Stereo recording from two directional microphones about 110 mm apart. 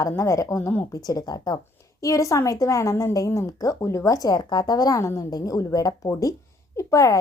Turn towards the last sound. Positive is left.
turn(degrees=30)  # may be behind; listen again after turning